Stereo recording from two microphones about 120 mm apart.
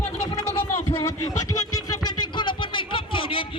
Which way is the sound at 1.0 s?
30° left (ahead or behind).